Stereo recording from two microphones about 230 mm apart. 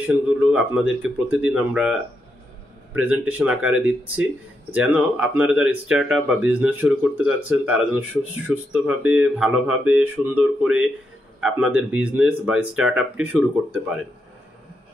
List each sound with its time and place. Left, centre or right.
0.0 s speech: centre